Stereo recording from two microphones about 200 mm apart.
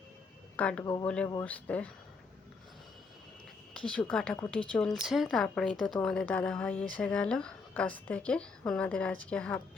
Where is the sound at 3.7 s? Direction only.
5° left (ahead or behind).